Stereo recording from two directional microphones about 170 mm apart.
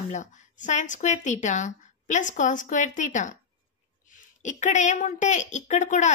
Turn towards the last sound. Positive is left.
turn(degrees=45)  # may be behind; listen again after turning